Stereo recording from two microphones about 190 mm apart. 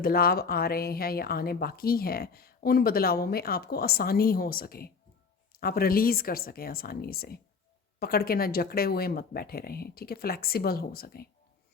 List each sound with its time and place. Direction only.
0.0 s a woman's voice: 50° left (ahead or behind)